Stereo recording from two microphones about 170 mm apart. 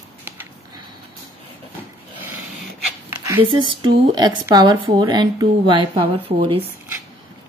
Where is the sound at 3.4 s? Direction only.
25° right (ahead or behind).